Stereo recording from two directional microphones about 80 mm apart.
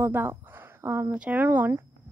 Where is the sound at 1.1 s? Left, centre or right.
Right.